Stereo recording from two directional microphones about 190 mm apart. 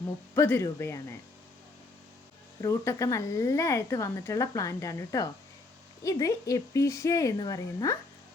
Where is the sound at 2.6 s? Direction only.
15° left (ahead or behind).